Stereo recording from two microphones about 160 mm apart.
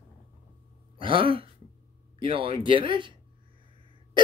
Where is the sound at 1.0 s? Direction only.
30° right (ahead or behind).